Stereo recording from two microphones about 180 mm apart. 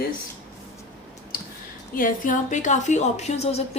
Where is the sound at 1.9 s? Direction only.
50° left (ahead or behind).